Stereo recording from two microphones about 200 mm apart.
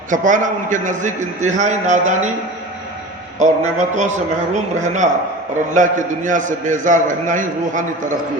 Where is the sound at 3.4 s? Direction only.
40° right (ahead or behind).